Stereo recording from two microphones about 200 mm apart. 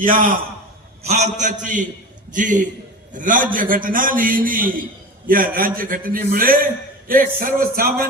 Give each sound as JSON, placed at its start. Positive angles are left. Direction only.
{"t": 1.0, "sound": "a man's voice", "side_deg": -35}